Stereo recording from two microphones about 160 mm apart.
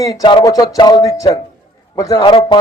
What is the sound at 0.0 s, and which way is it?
A man's voice, 25° left (ahead or behind).